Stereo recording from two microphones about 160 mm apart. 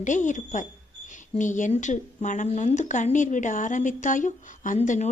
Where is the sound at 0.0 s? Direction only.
50° left (ahead or behind).